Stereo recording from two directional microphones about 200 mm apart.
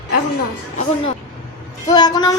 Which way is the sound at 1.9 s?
20° left (ahead or behind).